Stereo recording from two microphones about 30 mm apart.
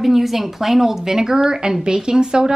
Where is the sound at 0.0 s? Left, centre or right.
Centre.